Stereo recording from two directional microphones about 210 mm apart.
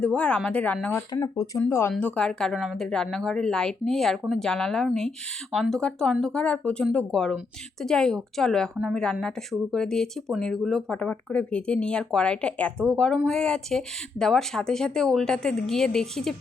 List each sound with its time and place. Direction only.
0.0 s speech: 5° left (ahead or behind)